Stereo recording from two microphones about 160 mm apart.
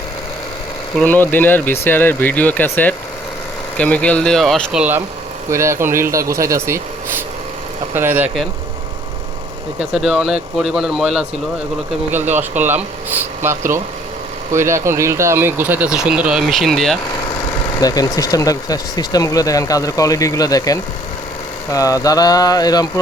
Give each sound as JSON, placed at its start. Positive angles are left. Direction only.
{"t": 1.0, "sound": "speech", "side_deg": 10}
{"t": 7.9, "sound": "speech", "side_deg": -15}
{"t": 9.9, "sound": "speech", "side_deg": -5}
{"t": 14.5, "sound": "speech", "side_deg": -15}
{"t": 17.7, "sound": "speech", "side_deg": 25}